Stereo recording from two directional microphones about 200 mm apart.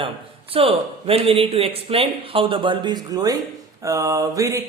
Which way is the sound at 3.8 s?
15° right (ahead or behind).